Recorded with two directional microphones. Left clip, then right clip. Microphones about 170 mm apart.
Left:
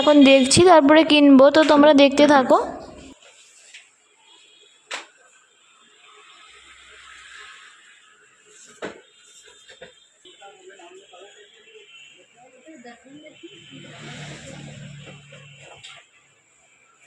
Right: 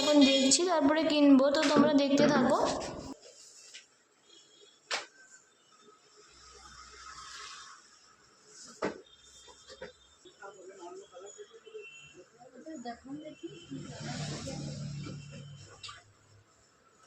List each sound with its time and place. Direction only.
0.3 s a woman's voice: 60° left (ahead or behind)